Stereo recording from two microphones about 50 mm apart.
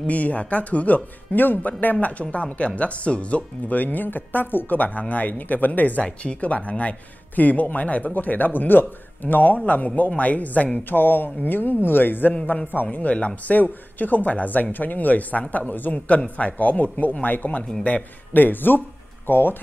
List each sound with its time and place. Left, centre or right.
0.0 s speech: left
12.9 s speech: left
13.6 s speech: left